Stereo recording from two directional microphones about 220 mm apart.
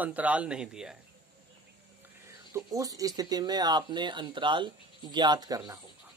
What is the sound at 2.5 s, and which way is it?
Speech, 15° right (ahead or behind).